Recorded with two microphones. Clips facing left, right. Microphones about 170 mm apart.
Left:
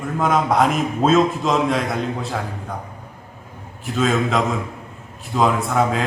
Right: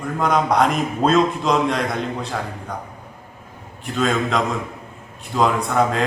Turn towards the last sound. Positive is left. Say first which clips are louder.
# even
turn(degrees=0)  # may be behind; listen again after turning